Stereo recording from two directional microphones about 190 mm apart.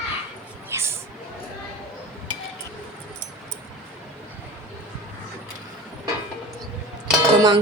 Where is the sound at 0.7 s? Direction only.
15° right (ahead or behind).